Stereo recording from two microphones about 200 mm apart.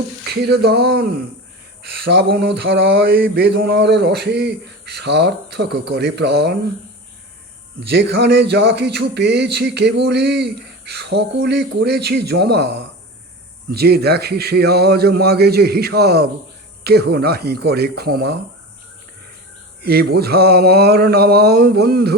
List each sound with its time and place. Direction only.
0.3 s speech: 55° right (ahead or behind)
7.8 s speech: 60° right (ahead or behind)
19.8 s speech: 50° right (ahead or behind)